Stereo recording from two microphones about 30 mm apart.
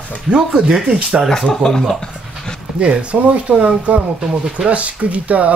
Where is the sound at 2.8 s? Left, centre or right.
Right.